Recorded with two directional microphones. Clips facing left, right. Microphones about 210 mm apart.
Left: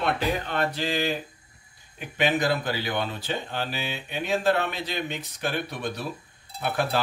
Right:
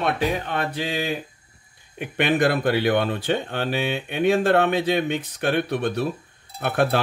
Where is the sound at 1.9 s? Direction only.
60° right (ahead or behind).